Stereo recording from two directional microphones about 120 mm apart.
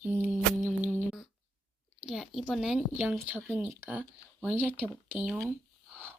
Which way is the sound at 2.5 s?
5° right (ahead or behind).